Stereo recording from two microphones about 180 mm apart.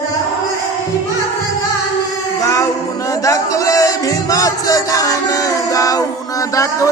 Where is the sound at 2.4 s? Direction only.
20° left (ahead or behind).